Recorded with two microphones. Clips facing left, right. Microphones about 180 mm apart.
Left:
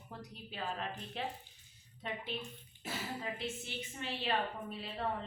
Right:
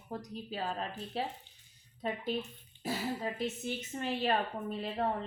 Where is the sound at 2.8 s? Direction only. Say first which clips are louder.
Right 6 dB; 35° right (ahead or behind).